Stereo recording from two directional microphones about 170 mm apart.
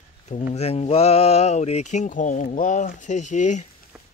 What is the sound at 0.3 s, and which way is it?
Speech, 40° left (ahead or behind).